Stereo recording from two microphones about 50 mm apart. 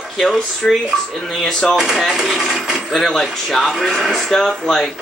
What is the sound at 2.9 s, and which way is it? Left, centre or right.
Speech, centre.